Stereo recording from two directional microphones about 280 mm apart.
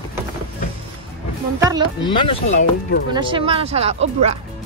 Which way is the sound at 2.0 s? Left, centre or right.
Centre.